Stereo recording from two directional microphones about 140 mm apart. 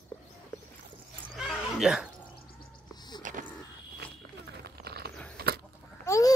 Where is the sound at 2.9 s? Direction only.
30° left (ahead or behind).